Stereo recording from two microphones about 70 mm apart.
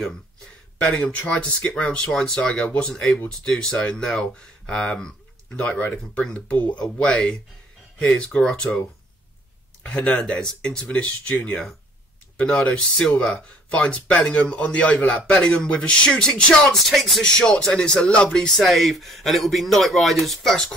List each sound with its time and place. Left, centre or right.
0.7 s a man's voice: centre
9.8 s a man's voice: centre
12.4 s a man's voice: centre
18.6 s speech: centre